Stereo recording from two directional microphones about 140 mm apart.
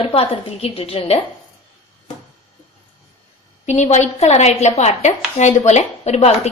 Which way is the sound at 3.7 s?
55° left (ahead or behind).